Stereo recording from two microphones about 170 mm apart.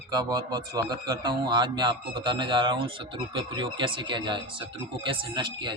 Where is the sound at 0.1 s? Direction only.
25° right (ahead or behind).